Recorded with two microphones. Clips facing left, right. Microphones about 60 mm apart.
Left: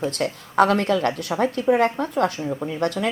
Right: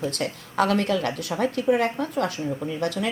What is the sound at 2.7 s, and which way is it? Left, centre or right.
Speech, left.